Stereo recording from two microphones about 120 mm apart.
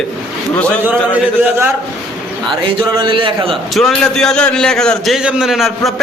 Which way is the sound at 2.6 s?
45° right (ahead or behind).